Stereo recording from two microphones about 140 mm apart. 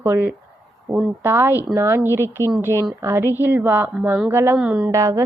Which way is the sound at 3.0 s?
20° right (ahead or behind).